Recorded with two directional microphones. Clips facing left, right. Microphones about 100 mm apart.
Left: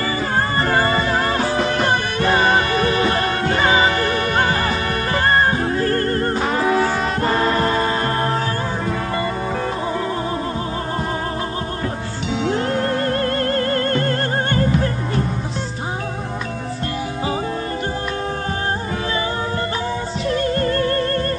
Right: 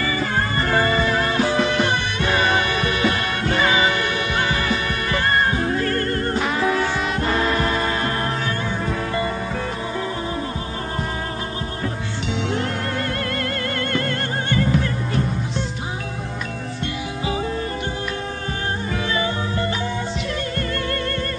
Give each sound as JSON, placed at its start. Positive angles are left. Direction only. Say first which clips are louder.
{"t": 1.5, "sound": "music", "louder": "left 1 dB", "side_deg": 40}
{"t": 12.5, "sound": "music", "louder": "left 5 dB", "side_deg": 35}
{"t": 20.2, "sound": "music", "louder": "left 7 dB", "side_deg": 35}